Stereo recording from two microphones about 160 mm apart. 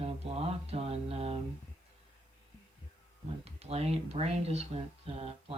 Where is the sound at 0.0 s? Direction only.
40° right (ahead or behind).